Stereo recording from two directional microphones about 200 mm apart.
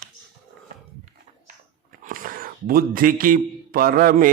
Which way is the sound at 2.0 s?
45° right (ahead or behind).